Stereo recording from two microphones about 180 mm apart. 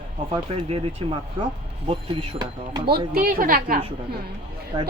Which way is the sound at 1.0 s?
30° right (ahead or behind).